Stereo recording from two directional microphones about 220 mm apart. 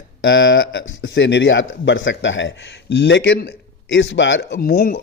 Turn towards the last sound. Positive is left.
turn(degrees=45)  # may be behind; listen again after turning